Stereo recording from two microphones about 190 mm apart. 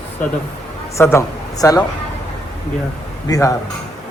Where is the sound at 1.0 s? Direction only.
15° left (ahead or behind).